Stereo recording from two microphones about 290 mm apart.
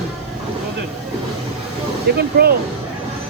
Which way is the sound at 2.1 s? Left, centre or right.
Right.